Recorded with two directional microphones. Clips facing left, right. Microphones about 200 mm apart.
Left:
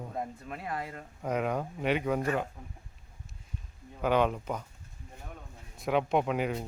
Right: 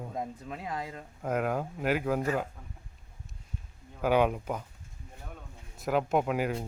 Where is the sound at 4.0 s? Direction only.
10° right (ahead or behind).